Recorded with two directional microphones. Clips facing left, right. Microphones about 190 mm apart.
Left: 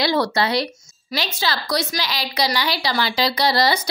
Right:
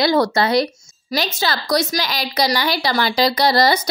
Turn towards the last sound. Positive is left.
turn(degrees=-45)  # may be behind; listen again after turning